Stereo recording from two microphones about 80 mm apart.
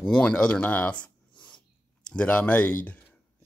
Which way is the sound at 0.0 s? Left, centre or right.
Centre.